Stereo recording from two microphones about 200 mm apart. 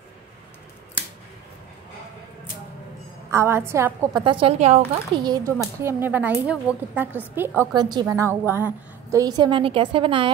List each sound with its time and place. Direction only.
3.3 s a woman's voice: 15° right (ahead or behind)
4.2 s a woman's voice: 25° right (ahead or behind)
5.2 s a woman's voice: 20° right (ahead or behind)